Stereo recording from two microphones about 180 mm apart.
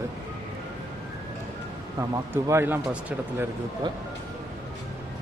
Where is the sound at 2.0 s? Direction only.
15° right (ahead or behind).